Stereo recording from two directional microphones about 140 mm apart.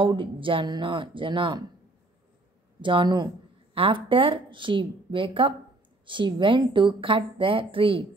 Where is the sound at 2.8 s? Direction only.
35° right (ahead or behind).